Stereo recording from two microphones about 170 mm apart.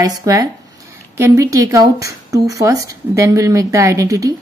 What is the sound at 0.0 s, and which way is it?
Speech, 20° right (ahead or behind).